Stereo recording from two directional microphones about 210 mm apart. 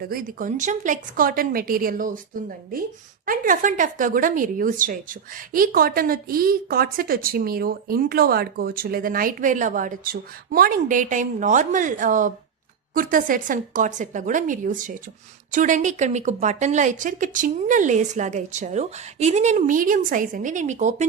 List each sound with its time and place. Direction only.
0.0 s a woman's voice: 45° right (ahead or behind)